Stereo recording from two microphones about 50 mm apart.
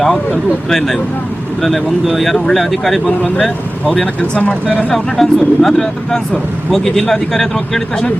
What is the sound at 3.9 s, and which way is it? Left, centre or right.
Speech, left.